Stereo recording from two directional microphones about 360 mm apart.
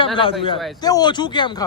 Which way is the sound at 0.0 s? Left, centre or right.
Centre.